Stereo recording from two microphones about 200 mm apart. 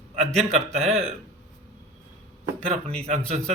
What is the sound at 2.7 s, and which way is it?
Speech, 30° right (ahead or behind).